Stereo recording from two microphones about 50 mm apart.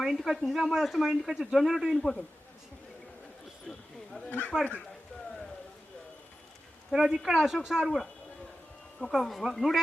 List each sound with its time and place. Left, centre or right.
0.1 s speech: centre
2.0 s a man's voice: centre
3.7 s a sound: centre
4.3 s speech: left
6.9 s speech: centre
7.9 s a man's voice: centre
9.1 s speech: centre